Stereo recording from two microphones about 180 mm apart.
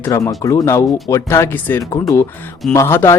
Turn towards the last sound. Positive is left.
turn(degrees=15)  # may be behind; listen again after turning